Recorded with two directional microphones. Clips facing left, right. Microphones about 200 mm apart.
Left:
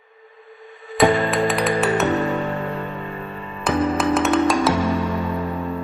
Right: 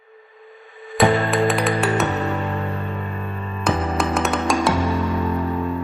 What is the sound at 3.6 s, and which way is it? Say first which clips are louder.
Music: left 2 dB; centre (ahead or behind).